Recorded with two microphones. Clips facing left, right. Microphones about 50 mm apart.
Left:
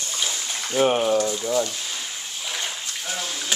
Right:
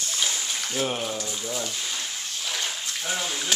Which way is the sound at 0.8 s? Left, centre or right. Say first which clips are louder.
Left 10 dB; left.